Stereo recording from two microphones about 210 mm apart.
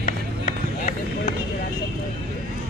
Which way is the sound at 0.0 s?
40° left (ahead or behind).